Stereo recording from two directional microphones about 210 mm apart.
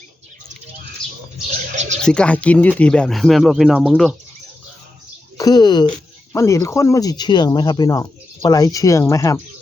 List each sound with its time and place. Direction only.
1.7 s a sound: 35° right (ahead or behind)
2.0 s speech: 5° left (ahead or behind)
5.4 s speech: 20° left (ahead or behind)